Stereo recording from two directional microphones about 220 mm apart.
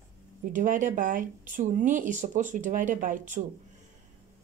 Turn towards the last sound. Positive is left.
turn(degrees=-35)  # may be behind; listen again after turning